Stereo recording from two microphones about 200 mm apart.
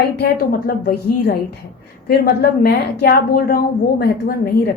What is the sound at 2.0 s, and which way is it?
A woman's voice, 50° left (ahead or behind).